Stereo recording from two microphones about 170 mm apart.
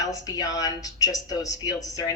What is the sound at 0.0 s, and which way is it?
A woman's voice, 20° left (ahead or behind).